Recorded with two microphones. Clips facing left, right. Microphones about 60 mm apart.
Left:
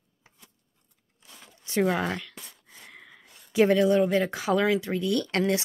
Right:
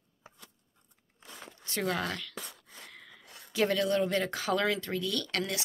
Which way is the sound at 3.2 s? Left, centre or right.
Right.